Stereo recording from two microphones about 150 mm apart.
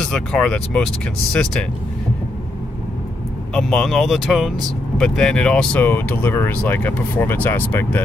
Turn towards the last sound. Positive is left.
turn(degrees=15)  # may be behind; listen again after turning